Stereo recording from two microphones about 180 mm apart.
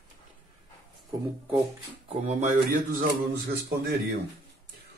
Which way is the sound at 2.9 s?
55° right (ahead or behind).